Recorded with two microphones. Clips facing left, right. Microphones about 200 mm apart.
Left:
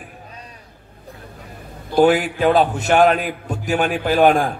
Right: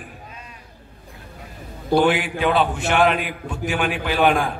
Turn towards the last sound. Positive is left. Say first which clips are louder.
# left 4 dB
turn(degrees=40)  # may be behind; listen again after turning